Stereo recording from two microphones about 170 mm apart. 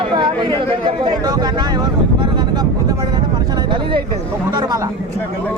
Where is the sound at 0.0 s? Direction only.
25° right (ahead or behind).